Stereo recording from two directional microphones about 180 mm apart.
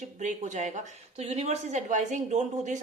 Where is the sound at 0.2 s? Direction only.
40° right (ahead or behind).